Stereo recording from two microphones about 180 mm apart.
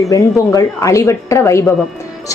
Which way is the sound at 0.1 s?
20° left (ahead or behind).